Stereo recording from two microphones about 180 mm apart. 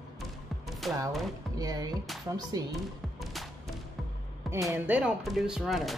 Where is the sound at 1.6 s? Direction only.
20° right (ahead or behind).